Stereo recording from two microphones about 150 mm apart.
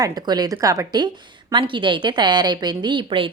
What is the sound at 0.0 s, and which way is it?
A woman's voice, 25° right (ahead or behind).